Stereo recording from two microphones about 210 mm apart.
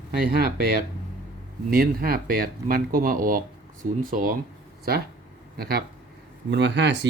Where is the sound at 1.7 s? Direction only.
45° right (ahead or behind).